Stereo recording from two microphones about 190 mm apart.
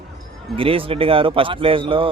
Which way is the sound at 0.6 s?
30° right (ahead or behind).